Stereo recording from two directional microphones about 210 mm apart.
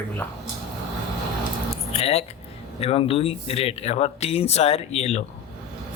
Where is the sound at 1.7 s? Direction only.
30° left (ahead or behind).